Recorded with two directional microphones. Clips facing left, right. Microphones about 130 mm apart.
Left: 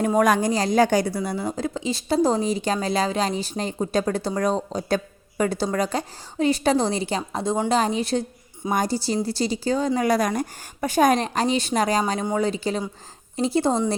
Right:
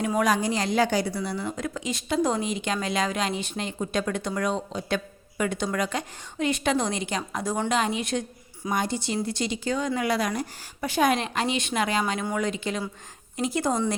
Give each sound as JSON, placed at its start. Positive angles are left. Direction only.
{"t": 0.0, "sound": "a woman's voice", "side_deg": 40}